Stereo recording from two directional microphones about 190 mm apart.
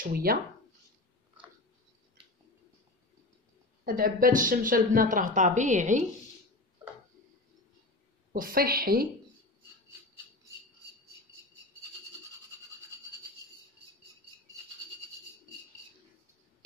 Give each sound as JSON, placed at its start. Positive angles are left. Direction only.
{"t": 0.0, "sound": "speech", "side_deg": -50}
{"t": 3.8, "sound": "speech", "side_deg": -50}
{"t": 8.3, "sound": "speech", "side_deg": -50}